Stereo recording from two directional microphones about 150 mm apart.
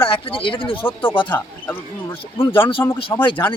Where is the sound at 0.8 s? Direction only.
15° left (ahead or behind).